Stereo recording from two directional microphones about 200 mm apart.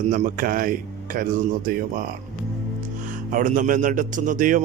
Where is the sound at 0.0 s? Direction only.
40° right (ahead or behind).